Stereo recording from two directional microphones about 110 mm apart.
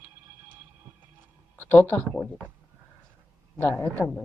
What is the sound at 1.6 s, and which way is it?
Speech, 15° left (ahead or behind).